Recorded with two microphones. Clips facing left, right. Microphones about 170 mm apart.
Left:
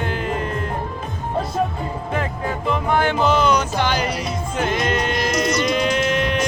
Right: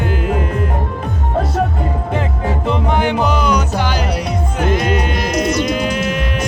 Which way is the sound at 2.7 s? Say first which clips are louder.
Right 2 dB; 20° right (ahead or behind).